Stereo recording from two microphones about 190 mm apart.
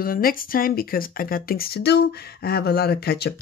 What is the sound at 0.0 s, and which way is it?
Speech, 50° left (ahead or behind).